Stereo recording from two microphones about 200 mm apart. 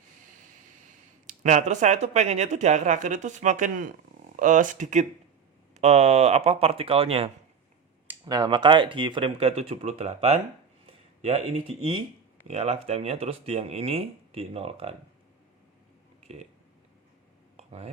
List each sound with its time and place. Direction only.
1.3 s speech: 35° right (ahead or behind)
16.2 s speech: 30° right (ahead or behind)
17.6 s a sound: 35° right (ahead or behind)